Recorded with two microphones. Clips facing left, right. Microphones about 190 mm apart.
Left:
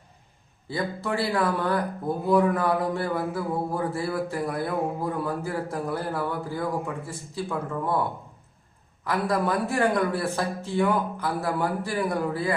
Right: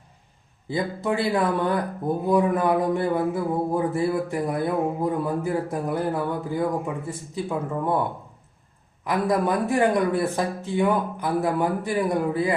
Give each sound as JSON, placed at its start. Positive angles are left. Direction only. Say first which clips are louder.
{"t": 0.7, "sound": "speech", "louder": "right 3 dB", "side_deg": -20}
{"t": 9.0, "sound": "speech", "louder": "right 3 dB", "side_deg": -20}